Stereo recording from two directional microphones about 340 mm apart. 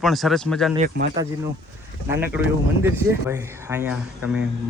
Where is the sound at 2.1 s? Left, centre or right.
Centre.